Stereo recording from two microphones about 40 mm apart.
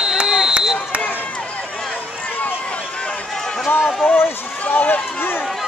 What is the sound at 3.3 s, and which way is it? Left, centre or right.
Run, centre.